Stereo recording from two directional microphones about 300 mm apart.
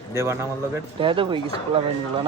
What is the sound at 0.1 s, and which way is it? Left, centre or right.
A man's voice, centre.